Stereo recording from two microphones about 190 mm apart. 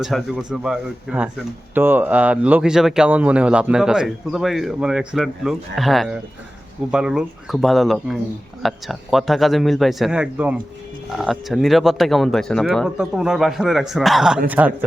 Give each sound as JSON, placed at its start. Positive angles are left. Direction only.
{"t": 0.0, "sound": "speech", "side_deg": 0}